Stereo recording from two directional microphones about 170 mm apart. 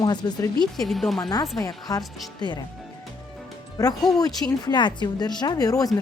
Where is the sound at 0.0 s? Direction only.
25° left (ahead or behind).